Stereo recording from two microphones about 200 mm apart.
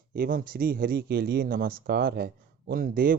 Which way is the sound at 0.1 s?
50° right (ahead or behind).